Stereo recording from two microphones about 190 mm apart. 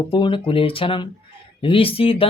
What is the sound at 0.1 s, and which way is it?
Speech, 25° left (ahead or behind).